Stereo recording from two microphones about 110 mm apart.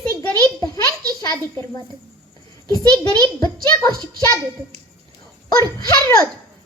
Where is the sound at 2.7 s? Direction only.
35° left (ahead or behind).